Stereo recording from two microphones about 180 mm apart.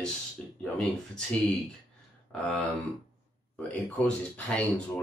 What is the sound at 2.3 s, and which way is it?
Speech, 5° left (ahead or behind).